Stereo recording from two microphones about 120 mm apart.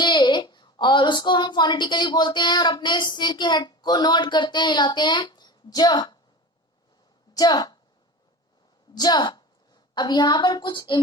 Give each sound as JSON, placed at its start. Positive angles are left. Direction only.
{"t": 0.0, "sound": "a woman's voice", "side_deg": 40}
{"t": 7.3, "sound": "a woman's voice", "side_deg": 35}
{"t": 9.0, "sound": "a woman's voice", "side_deg": 35}